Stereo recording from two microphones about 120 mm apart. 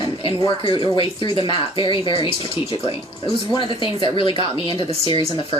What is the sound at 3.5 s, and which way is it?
Speech, 45° left (ahead or behind).